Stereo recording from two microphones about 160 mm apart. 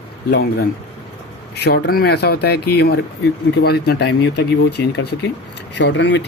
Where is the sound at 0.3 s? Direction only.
80° left.